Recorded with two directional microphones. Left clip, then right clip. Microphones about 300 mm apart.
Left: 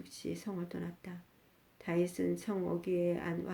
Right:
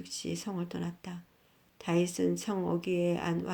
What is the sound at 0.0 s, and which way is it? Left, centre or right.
Speech, right.